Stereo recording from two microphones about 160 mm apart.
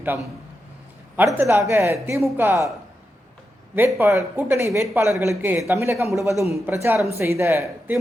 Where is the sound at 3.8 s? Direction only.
15° right (ahead or behind).